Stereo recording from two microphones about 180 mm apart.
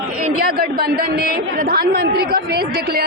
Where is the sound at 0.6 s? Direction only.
55° right (ahead or behind).